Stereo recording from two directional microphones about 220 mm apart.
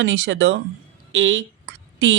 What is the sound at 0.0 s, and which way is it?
Speech, 55° right (ahead or behind).